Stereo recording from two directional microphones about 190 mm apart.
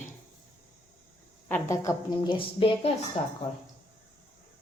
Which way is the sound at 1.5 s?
15° left (ahead or behind).